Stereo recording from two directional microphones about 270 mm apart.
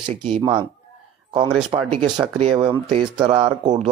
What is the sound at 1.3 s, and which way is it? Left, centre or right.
Speech, centre.